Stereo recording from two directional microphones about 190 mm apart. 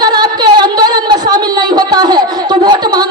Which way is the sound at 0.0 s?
20° right (ahead or behind).